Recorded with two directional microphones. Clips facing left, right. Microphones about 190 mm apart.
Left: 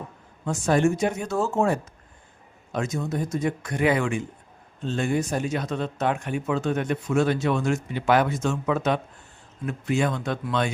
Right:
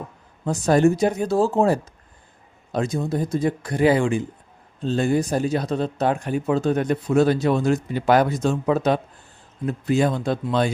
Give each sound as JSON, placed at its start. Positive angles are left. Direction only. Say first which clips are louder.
{"t": 0.4, "sound": "speech", "louder": "right 4 dB", "side_deg": -35}